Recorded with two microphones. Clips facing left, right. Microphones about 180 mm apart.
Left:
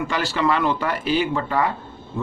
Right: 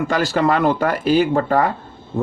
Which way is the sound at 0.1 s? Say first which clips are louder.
Right 5 dB; 40° right (ahead or behind).